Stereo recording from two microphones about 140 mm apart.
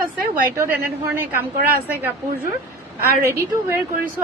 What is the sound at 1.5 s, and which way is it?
Speech, 90° right.